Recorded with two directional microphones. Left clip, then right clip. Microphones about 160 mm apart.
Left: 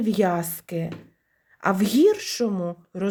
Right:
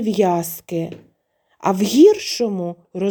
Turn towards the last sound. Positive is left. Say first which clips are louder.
# right 5 dB
turn(degrees=-30)  # may be behind; listen again after turning